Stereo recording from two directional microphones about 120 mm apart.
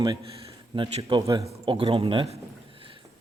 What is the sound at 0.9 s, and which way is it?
Speech, 60° right (ahead or behind).